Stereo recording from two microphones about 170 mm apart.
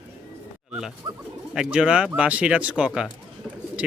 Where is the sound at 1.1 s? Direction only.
25° right (ahead or behind).